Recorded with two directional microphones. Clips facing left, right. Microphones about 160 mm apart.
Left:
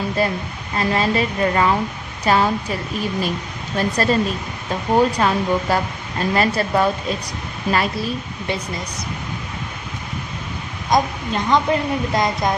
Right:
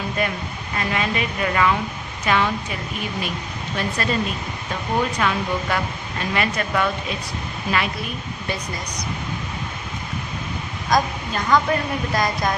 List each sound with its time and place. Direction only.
0.2 s speech: 35° left (ahead or behind)
3.8 s speech: 40° left (ahead or behind)
10.8 s a woman's voice: 20° left (ahead or behind)